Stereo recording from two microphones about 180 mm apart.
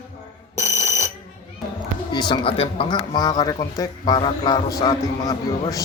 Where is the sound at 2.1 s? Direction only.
25° left (ahead or behind).